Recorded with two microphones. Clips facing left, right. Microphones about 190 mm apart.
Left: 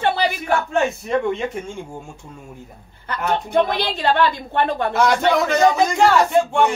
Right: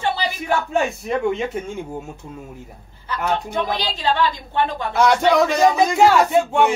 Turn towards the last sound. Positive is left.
turn(degrees=-5)  # may be behind; listen again after turning